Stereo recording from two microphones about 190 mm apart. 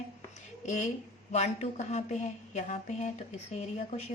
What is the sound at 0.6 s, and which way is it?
A woman's voice, 40° left (ahead or behind).